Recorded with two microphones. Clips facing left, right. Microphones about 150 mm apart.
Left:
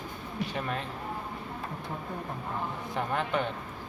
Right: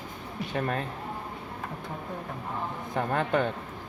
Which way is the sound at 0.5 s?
50° right (ahead or behind).